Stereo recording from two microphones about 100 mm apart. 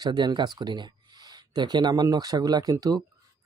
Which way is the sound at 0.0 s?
45° right (ahead or behind).